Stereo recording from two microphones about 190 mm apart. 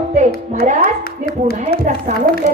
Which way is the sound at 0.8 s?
55° left (ahead or behind).